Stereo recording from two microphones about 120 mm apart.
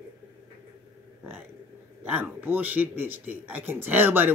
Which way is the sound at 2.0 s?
15° right (ahead or behind).